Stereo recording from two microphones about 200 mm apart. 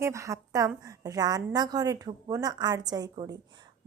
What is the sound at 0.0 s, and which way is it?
Speech, 15° right (ahead or behind).